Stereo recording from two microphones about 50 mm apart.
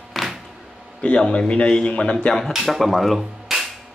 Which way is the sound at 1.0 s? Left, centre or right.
Centre.